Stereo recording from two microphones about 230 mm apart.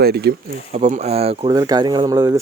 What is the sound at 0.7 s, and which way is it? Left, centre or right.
Speech, right.